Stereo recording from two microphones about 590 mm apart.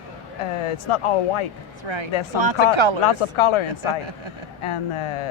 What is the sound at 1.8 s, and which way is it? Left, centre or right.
Speech, right.